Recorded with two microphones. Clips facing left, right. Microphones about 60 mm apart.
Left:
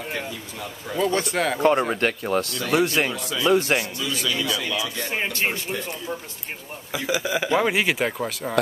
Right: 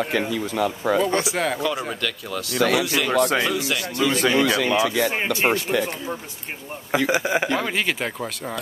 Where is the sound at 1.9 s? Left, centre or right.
Left.